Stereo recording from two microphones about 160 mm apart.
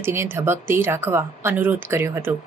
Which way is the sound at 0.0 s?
15° right (ahead or behind).